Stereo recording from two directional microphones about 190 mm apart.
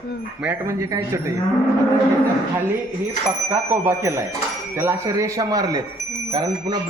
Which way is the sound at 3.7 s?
10° right (ahead or behind).